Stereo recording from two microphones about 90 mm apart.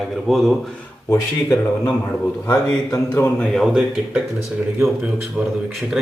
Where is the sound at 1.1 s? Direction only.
40° left (ahead or behind).